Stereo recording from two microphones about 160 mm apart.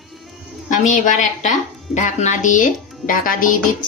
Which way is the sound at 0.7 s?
50° left (ahead or behind).